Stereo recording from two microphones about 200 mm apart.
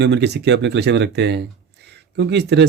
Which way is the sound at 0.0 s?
55° right (ahead or behind).